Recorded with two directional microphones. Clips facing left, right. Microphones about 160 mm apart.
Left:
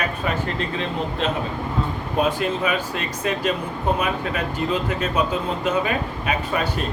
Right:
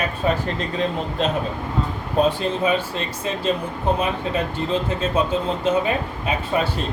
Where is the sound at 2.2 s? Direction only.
30° right (ahead or behind).